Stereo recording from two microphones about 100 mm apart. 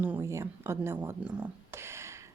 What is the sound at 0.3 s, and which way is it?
Speech, 30° right (ahead or behind).